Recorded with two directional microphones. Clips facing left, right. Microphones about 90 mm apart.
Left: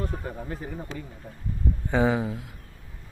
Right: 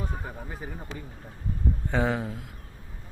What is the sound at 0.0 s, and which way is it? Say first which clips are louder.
Speech: left 3 dB; 10° right (ahead or behind).